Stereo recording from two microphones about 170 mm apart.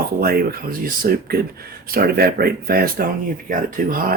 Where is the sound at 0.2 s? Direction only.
65° right (ahead or behind).